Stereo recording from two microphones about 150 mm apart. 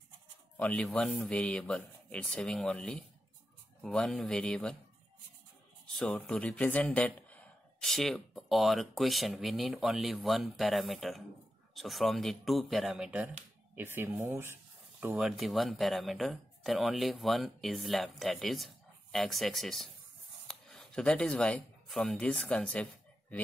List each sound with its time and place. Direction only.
0.6 s speech: 5° left (ahead or behind)
5.9 s speech: 5° left (ahead or behind); by 15.1 s 15° right (ahead or behind)
15.1 s speech: centre (ahead or behind)